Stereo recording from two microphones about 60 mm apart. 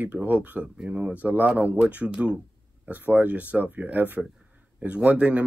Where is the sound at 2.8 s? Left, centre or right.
Right.